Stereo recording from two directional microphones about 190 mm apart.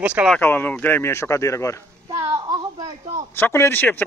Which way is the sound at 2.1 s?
20° right (ahead or behind).